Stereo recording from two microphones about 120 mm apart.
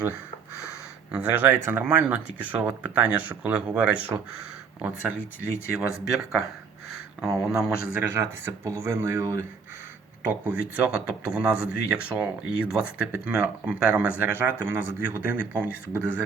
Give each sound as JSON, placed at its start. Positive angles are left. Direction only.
{"t": 1.1, "sound": "speech", "side_deg": -10}
{"t": 6.1, "sound": "speech", "side_deg": 0}
{"t": 8.0, "sound": "speech", "side_deg": -20}
{"t": 10.2, "sound": "speech", "side_deg": -10}